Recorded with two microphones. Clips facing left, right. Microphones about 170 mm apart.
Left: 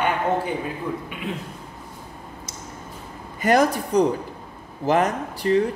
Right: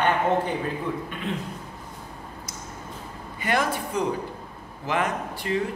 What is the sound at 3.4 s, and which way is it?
A woman's voice, 40° left (ahead or behind).